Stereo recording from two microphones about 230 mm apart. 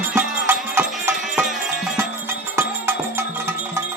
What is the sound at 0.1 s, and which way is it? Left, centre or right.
Music, centre.